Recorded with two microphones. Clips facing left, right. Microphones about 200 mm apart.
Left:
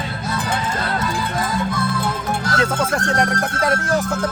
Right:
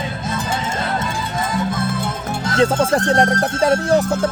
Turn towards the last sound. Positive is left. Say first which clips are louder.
# right 4 dB
turn(degrees=-30)  # may be behind; listen again after turning